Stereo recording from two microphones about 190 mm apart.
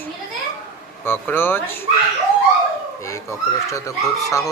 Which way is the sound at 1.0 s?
10° left (ahead or behind).